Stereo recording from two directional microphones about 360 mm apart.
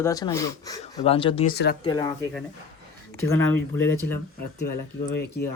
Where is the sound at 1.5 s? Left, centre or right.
Left.